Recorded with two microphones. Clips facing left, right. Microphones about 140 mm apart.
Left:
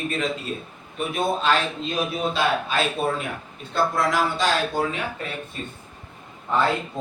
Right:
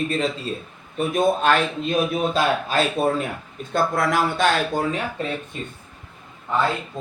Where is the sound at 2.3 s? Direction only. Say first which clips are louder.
Even; 40° right (ahead or behind).